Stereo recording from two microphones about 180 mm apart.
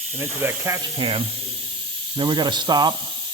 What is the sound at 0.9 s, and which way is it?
Speech, 30° right (ahead or behind).